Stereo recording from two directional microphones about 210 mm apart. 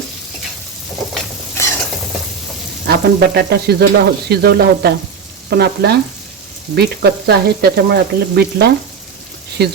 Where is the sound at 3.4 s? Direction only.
50° right (ahead or behind).